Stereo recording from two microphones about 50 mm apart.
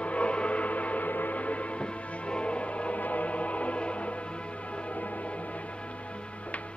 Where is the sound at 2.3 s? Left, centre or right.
Left.